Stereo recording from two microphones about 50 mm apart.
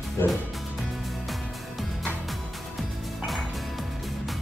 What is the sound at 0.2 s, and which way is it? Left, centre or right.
Music, left.